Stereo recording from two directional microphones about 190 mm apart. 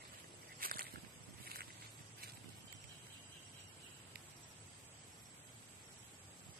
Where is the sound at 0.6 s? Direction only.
50° right (ahead or behind).